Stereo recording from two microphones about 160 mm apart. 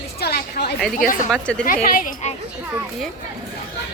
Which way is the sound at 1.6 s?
60° left (ahead or behind).